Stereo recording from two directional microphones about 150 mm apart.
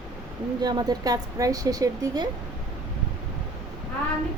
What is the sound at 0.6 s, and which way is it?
Speech, 30° right (ahead or behind).